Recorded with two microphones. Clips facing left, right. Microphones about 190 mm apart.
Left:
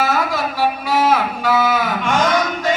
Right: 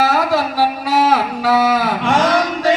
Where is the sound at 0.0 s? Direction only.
35° right (ahead or behind).